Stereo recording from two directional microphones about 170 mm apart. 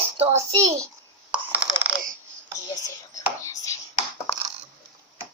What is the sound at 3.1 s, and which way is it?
Chopping, 20° left (ahead or behind).